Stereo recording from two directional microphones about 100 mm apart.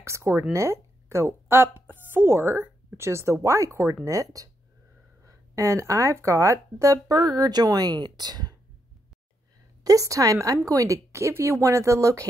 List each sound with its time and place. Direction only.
0.0 s speech: 25° right (ahead or behind); by 8.5 s 45° right (ahead or behind)
9.8 s speech: 35° right (ahead or behind)